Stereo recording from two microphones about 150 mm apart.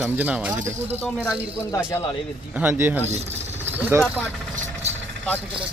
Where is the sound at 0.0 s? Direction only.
10° right (ahead or behind).